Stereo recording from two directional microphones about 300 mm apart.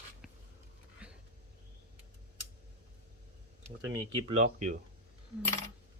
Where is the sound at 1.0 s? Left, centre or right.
Centre.